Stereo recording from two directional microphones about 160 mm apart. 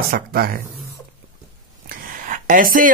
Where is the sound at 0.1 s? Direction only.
70° right (ahead or behind).